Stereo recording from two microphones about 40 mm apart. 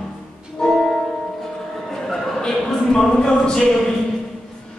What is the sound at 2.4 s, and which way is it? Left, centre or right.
Speech, centre.